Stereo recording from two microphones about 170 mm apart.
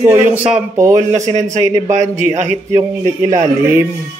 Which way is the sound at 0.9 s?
45° right (ahead or behind).